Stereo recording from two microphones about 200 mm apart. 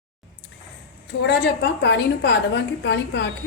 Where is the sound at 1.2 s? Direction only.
55° left (ahead or behind).